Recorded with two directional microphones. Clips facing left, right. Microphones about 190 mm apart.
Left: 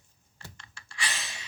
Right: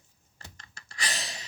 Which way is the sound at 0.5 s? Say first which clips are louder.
Even; 40° right (ahead or behind).